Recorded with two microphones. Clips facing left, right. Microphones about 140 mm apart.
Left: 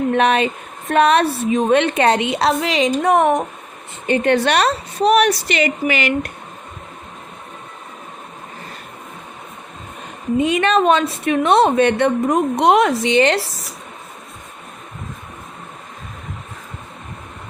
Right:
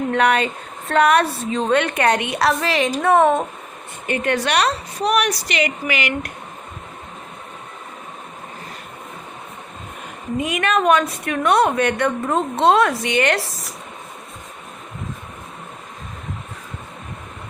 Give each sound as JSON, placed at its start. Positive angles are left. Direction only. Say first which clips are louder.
{"t": 0.1, "sound": "a woman's voice", "louder": "even", "side_deg": 25}
{"t": 4.0, "sound": "a woman's voice", "louder": "left 5 dB", "side_deg": 25}
{"t": 10.5, "sound": "a woman's voice", "louder": "left 1 dB", "side_deg": 30}